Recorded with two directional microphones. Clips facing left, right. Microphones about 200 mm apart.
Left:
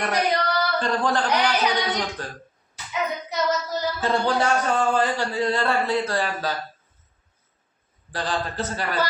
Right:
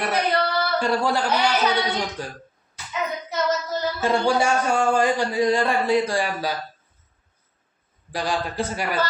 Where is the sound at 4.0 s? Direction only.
10° right (ahead or behind).